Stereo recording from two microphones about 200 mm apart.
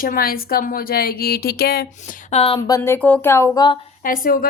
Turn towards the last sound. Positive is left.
turn(degrees=45)  # may be behind; listen again after turning